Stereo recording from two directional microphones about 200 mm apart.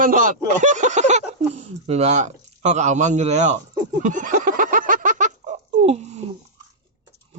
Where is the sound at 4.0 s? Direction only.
40° right (ahead or behind).